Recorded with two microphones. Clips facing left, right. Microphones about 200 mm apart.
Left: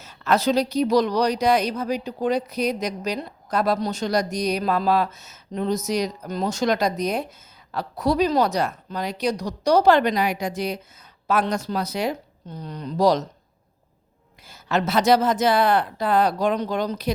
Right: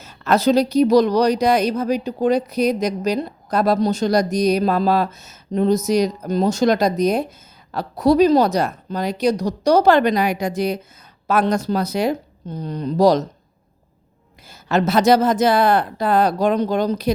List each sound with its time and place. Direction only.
0.0 s speech: 45° right (ahead or behind)
14.4 s speech: 40° right (ahead or behind)